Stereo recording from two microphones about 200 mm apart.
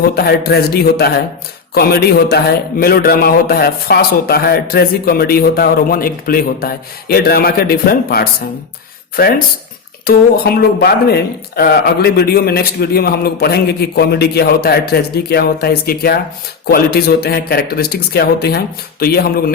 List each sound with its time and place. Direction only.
0.1 s a man's voice: 50° left (ahead or behind)
10.1 s a man's voice: 50° left (ahead or behind)